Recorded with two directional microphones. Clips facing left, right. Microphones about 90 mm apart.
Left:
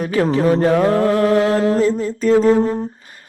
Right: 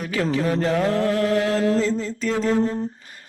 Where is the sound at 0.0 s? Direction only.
40° left (ahead or behind).